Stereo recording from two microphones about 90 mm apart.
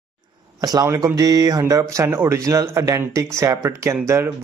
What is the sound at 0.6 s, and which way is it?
A man's voice, 45° right (ahead or behind).